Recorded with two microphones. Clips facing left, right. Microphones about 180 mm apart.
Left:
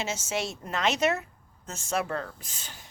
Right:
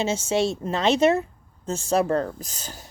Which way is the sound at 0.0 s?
30° right (ahead or behind).